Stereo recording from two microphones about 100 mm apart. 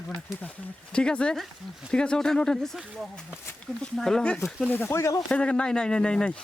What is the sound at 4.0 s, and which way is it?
Speech, 5° left (ahead or behind).